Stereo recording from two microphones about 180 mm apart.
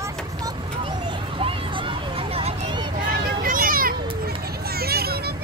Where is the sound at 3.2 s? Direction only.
50° right (ahead or behind).